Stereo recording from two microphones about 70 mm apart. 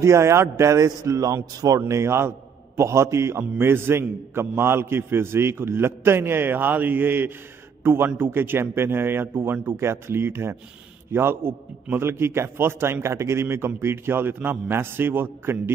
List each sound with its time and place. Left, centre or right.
0.0 s a man's voice: right
1.9 s a man's voice: right